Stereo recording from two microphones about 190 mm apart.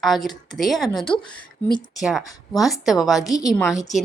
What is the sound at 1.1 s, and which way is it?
Speech, 25° left (ahead or behind).